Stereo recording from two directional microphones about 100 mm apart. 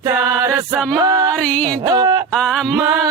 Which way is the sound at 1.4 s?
10° left (ahead or behind).